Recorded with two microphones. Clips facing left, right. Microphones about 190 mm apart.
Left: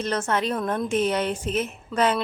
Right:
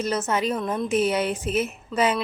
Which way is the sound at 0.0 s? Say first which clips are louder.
Right 1 dB; 5° right (ahead or behind).